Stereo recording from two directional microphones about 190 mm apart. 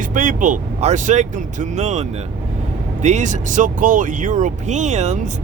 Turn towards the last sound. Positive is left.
turn(degrees=-40)  # may be behind; listen again after turning